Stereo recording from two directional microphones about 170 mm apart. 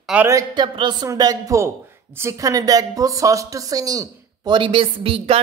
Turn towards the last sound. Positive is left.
turn(degrees=-35)  # may be behind; listen again after turning